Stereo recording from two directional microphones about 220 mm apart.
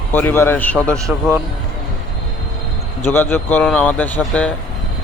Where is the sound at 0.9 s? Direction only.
15° right (ahead or behind).